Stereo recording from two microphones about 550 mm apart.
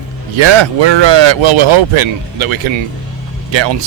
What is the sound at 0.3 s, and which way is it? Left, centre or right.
Speech, right.